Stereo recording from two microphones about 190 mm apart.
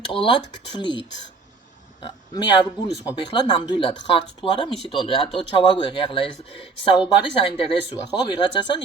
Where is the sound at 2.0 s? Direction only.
25° left (ahead or behind).